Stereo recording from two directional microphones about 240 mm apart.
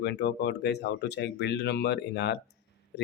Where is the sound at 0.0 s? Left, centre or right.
Left.